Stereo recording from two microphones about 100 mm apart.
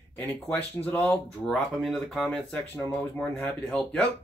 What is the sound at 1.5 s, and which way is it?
Speech, centre (ahead or behind).